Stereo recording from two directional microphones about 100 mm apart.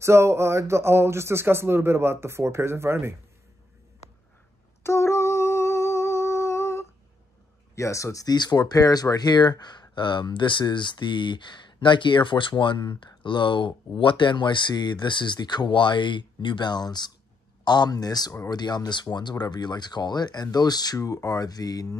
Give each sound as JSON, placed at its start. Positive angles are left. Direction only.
{"t": 0.0, "sound": "speech", "side_deg": -30}
{"t": 4.8, "sound": "humming", "side_deg": 25}
{"t": 7.7, "sound": "speech", "side_deg": 30}